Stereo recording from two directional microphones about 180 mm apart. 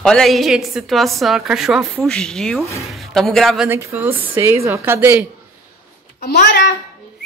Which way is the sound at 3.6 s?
15° right (ahead or behind).